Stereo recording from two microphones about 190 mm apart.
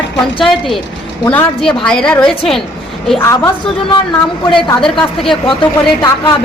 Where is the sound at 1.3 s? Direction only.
5° left (ahead or behind).